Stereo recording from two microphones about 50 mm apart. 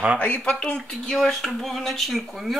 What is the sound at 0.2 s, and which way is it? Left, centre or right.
Speech, left.